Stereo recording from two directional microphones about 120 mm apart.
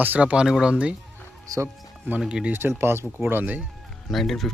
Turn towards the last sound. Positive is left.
turn(degrees=0)  # may be behind; listen again after turning